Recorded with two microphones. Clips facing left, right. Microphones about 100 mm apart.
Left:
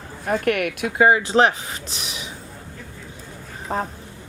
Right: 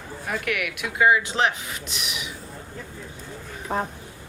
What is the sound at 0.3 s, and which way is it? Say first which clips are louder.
Speech: left 7 dB; 40° left (ahead or behind).